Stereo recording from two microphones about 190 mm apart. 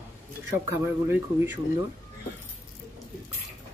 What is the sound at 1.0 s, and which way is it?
Speech, 10° right (ahead or behind).